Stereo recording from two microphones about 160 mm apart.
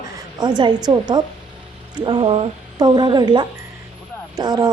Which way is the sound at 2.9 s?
25° right (ahead or behind).